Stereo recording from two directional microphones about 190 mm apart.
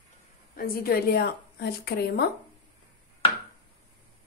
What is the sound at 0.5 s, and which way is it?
A woman's voice, 50° left (ahead or behind).